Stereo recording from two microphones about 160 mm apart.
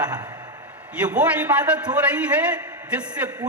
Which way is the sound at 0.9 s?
10° right (ahead or behind).